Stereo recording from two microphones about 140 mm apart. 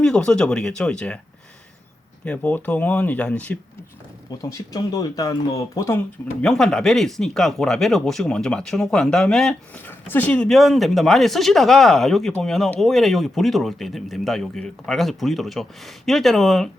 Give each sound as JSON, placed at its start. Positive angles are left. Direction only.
{"t": 0.0, "sound": "speech", "side_deg": 5}
{"t": 2.2, "sound": "speech", "side_deg": 10}
{"t": 4.5, "sound": "speech", "side_deg": 25}
{"t": 6.4, "sound": "speech", "side_deg": 5}